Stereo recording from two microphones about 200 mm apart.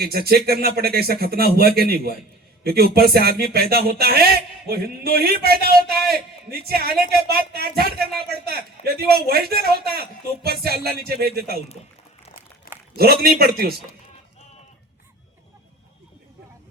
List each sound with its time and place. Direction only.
0.0 s a man's voice: 50° right (ahead or behind)
12.7 s a sound: 45° left (ahead or behind)
13.0 s a man's voice: 50° right (ahead or behind)